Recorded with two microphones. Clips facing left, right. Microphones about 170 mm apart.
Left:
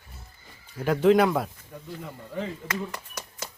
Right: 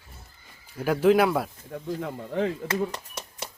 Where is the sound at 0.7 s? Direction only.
5° right (ahead or behind).